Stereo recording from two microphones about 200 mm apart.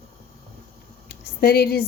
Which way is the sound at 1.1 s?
50° left (ahead or behind).